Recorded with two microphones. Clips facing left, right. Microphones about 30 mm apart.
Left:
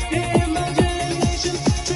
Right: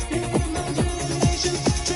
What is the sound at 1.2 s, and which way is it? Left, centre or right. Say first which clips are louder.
Music: left 1 dB; centre.